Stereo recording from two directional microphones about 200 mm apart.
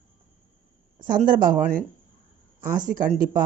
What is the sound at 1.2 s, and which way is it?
Speech, 45° right (ahead or behind).